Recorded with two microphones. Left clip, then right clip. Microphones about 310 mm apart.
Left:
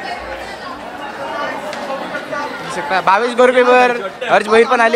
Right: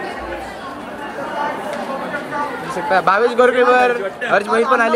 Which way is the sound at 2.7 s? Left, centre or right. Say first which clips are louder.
Left 1 dB; centre.